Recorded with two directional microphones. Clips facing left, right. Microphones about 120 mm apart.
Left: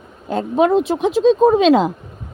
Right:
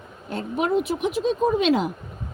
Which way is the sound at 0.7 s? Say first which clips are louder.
Left 7 dB; 90° left.